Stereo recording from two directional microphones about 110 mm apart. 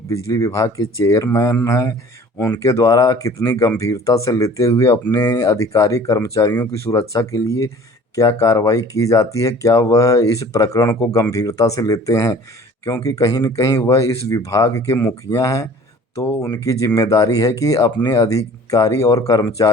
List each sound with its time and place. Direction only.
0.1 s speech: 25° left (ahead or behind)